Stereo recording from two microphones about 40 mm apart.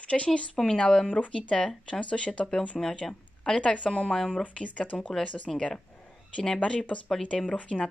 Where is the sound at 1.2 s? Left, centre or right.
Left.